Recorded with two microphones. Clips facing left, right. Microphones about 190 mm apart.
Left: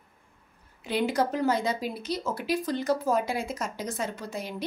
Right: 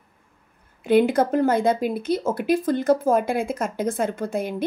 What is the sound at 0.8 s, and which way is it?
Speech, 55° right (ahead or behind).